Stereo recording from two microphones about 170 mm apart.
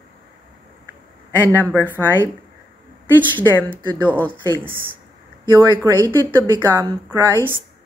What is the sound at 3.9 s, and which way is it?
Speech, 10° left (ahead or behind).